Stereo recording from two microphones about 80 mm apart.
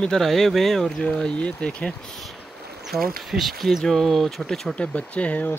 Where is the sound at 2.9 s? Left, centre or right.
Centre.